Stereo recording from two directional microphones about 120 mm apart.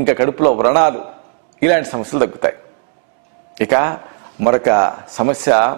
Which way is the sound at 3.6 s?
15° right (ahead or behind).